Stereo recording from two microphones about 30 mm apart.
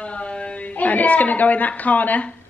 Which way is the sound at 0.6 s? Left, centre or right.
Left.